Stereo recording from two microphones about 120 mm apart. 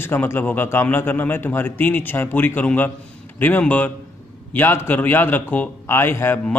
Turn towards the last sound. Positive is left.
turn(degrees=20)  # may be behind; listen again after turning